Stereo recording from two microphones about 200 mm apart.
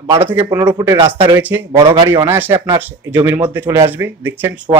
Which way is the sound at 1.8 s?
25° right (ahead or behind).